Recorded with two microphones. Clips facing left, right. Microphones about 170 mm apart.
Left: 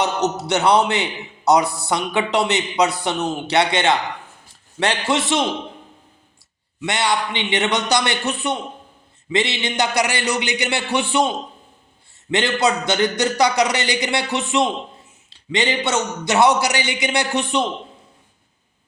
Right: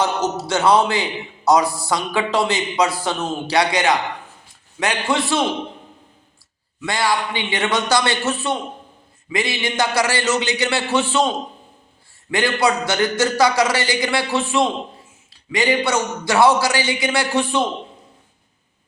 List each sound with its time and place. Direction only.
0.3 s a man's voice: 20° left (ahead or behind)
6.8 s a man's voice: 20° left (ahead or behind)
12.3 s a man's voice: 20° left (ahead or behind)